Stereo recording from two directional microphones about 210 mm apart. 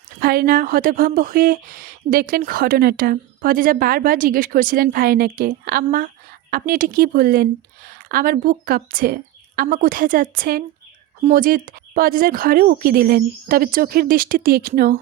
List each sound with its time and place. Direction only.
0.2 s speech: 45° right (ahead or behind)